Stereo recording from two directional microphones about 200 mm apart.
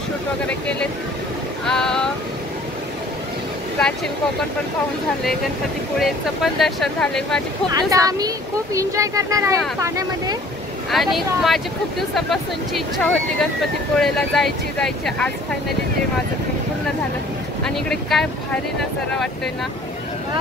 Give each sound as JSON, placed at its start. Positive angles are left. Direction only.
{"t": 1.7, "sound": "speech", "side_deg": 5}
{"t": 5.9, "sound": "speech", "side_deg": 0}
{"t": 7.7, "sound": "speech", "side_deg": -20}
{"t": 10.9, "sound": "speech", "side_deg": 0}
{"t": 17.6, "sound": "speech", "side_deg": 5}